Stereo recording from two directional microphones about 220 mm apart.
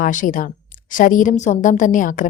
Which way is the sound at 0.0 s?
35° left (ahead or behind).